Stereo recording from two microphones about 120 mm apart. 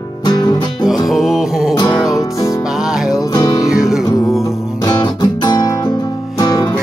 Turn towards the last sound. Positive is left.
turn(degrees=30)  # may be behind; listen again after turning